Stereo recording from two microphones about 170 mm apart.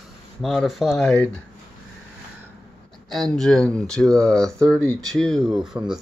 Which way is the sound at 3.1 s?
Centre (ahead or behind).